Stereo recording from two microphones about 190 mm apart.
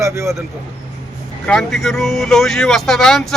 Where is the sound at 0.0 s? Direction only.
15° right (ahead or behind).